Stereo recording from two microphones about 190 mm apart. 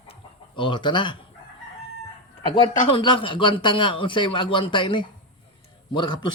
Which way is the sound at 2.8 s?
25° left (ahead or behind).